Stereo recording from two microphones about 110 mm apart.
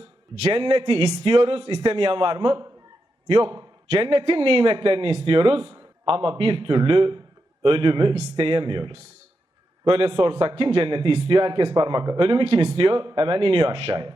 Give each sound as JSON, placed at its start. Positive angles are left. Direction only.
{"t": 0.4, "sound": "a man's voice", "side_deg": -55}
{"t": 3.8, "sound": "a man's voice", "side_deg": -55}